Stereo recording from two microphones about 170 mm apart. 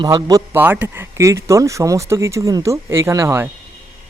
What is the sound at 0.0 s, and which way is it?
Speech, 25° right (ahead or behind).